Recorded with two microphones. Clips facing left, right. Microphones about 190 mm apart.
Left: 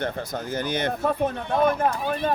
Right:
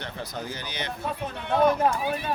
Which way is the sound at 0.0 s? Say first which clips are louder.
Left 6 dB; 50° left (ahead or behind).